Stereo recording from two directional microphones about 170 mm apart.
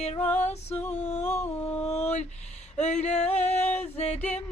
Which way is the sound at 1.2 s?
10° left (ahead or behind).